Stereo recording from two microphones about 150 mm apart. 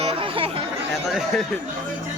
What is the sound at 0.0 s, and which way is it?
Chatter, 40° right (ahead or behind).